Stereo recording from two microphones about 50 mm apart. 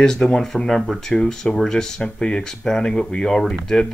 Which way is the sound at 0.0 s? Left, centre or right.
Centre.